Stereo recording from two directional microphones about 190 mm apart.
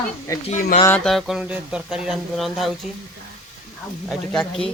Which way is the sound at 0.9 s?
5° left (ahead or behind).